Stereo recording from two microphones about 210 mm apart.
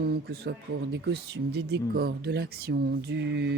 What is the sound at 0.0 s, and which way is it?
Speech, 50° right (ahead or behind).